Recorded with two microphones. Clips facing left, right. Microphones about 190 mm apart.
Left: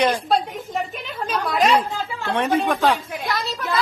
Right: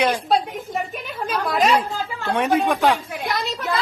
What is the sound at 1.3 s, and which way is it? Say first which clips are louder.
Chatter: even; centre (ahead or behind).